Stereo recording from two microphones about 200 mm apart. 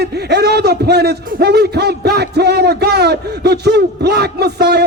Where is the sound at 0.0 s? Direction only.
55° right (ahead or behind).